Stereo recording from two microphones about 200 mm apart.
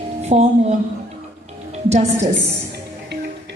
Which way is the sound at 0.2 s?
35° right (ahead or behind).